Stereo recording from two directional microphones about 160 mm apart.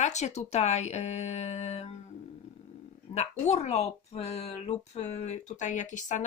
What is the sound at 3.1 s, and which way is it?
A woman's voice, 40° left (ahead or behind).